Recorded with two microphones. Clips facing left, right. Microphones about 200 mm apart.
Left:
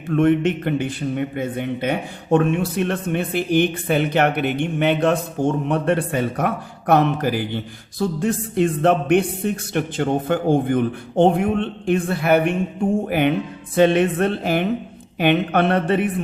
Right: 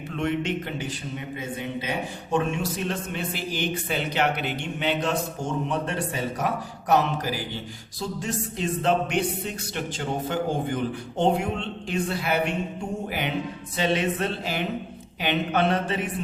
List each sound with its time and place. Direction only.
0.1 s a man's voice: 55° left (ahead or behind)